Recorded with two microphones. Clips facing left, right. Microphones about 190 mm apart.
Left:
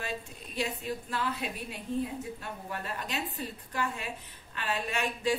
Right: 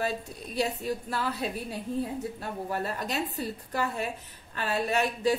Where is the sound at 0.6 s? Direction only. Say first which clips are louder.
Right 4 dB; 40° right (ahead or behind).